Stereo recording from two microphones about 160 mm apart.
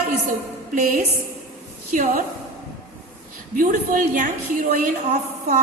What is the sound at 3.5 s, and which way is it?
Music, 55° right (ahead or behind).